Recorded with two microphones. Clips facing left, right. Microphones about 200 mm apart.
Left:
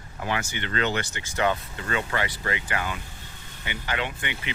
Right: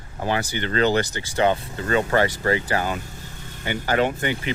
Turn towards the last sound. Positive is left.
turn(degrees=-40)  # may be behind; listen again after turning